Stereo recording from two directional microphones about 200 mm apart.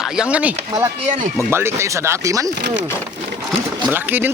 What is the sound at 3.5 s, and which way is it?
Speech, 10° right (ahead or behind).